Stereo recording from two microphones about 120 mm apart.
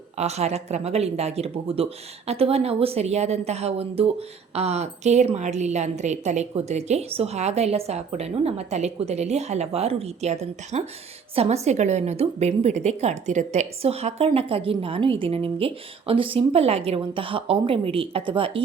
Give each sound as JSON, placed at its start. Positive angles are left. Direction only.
{"t": 0.2, "sound": "a woman's voice", "side_deg": -65}